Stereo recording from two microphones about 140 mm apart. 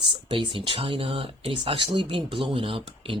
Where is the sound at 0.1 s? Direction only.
35° right (ahead or behind).